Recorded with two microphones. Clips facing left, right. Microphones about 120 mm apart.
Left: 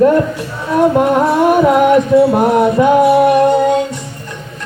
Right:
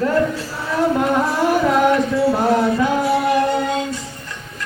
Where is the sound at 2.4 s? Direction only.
65° left (ahead or behind).